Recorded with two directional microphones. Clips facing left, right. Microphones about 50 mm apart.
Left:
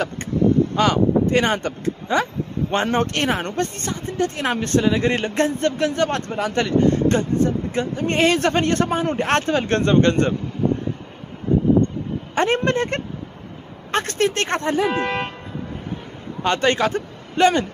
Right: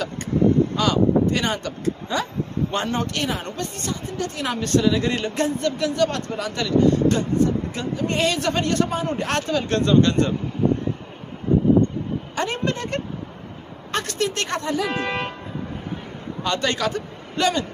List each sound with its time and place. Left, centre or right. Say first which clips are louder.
0.7 s speech: left 1 dB; left
12.4 s speech: left 7 dB; left
15.0 s vehicle: left 2 dB; centre
16.4 s a man's voice: left 4 dB; left